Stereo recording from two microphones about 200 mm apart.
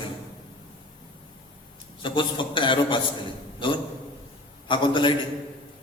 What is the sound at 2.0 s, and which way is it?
A man's voice, 25° left (ahead or behind).